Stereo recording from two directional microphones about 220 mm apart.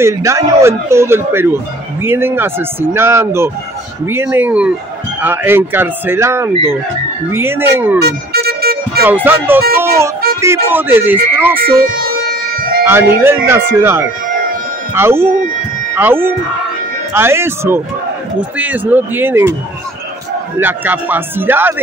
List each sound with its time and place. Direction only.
0.0 s speech: 15° right (ahead or behind)
8.0 s vehicle: 45° right (ahead or behind)
9.0 s speech: 10° right (ahead or behind)
11.6 s music: 40° right (ahead or behind)
13.2 s speech: 10° right (ahead or behind)
20.5 s speech: 10° right (ahead or behind)